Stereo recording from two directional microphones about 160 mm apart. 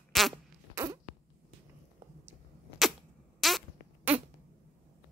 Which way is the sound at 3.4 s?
Centre (ahead or behind).